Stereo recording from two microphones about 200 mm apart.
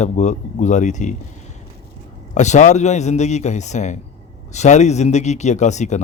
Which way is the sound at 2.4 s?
35° left (ahead or behind).